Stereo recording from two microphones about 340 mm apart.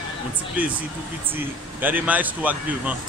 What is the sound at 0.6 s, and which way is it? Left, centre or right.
Speech, centre.